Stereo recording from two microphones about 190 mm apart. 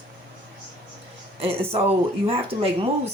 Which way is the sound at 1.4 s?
30° right (ahead or behind).